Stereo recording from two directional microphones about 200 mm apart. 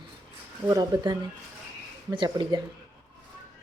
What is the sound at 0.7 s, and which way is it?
Speech, 20° right (ahead or behind).